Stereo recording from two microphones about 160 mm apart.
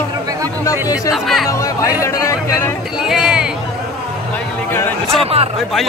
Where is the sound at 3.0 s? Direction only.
5° right (ahead or behind).